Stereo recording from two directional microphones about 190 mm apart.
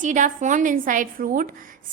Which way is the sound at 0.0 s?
40° right (ahead or behind).